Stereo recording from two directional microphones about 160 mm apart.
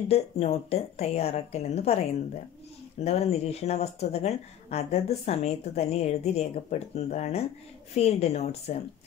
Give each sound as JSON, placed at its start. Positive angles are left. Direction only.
{"t": 0.1, "sound": "speech", "side_deg": 40}
{"t": 3.0, "sound": "speech", "side_deg": 40}